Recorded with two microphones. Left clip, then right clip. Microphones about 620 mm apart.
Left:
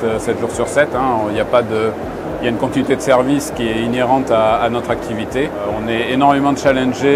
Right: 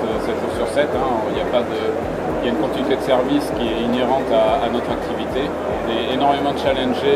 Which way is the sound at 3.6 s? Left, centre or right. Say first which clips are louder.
Left 3 dB; left.